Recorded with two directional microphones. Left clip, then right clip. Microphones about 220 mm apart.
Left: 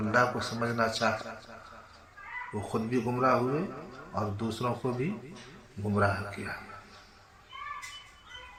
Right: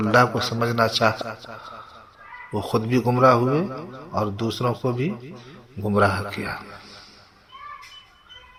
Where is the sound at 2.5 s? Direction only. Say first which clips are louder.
Right 10 dB; 35° right (ahead or behind).